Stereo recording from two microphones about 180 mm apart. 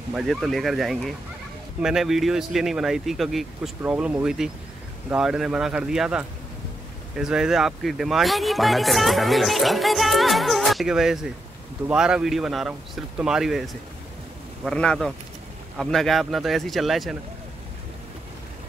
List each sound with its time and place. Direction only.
0.1 s speech: centre (ahead or behind)